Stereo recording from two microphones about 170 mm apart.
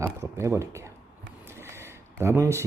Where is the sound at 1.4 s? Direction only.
15° right (ahead or behind).